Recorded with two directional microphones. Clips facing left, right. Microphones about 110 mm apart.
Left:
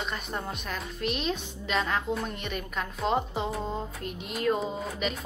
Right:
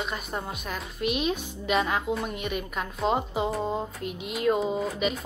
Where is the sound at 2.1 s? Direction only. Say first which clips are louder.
Right 2 dB; 5° right (ahead or behind).